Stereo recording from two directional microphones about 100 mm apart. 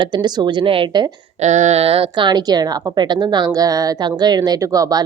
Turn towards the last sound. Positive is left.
turn(degrees=-40)  # may be behind; listen again after turning